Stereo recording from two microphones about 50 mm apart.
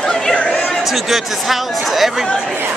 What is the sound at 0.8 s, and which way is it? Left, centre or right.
Speech, centre.